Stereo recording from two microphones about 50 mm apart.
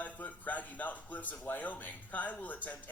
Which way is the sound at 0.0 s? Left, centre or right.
Left.